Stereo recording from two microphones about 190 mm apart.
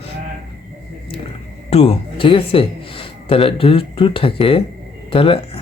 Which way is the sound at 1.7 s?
30° left (ahead or behind).